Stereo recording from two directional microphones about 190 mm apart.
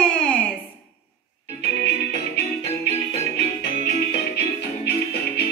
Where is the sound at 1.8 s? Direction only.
60° left (ahead or behind).